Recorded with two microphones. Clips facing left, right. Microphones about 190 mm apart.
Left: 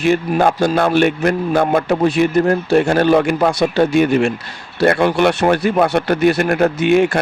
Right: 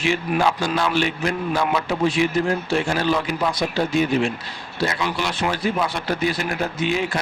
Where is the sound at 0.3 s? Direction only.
50° left (ahead or behind).